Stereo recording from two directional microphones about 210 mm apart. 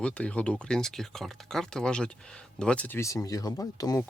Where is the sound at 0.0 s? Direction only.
5° left (ahead or behind).